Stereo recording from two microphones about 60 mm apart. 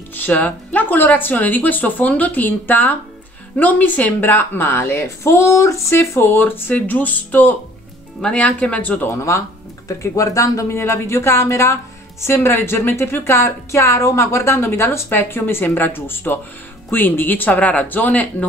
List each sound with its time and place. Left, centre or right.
0.1 s a woman's voice: left
6.0 s a woman's voice: left
8.2 s speech: centre
9.8 s speech: left
10.8 s speech: left
15.0 s a woman's voice: left